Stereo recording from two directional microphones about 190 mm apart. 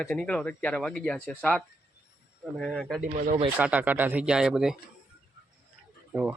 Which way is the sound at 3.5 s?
10° right (ahead or behind).